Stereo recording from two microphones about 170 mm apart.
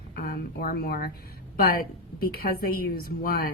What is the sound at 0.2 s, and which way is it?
A woman's voice, 60° left (ahead or behind).